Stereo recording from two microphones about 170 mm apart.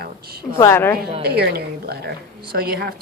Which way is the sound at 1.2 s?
70° right (ahead or behind).